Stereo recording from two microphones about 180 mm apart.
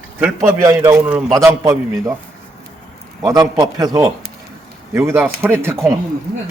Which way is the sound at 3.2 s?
20° right (ahead or behind).